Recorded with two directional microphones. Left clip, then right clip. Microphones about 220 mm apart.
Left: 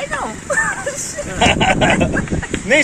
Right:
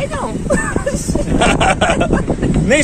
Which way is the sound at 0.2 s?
10° right (ahead or behind).